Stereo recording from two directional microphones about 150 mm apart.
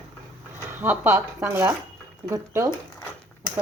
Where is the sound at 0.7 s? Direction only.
15° right (ahead or behind).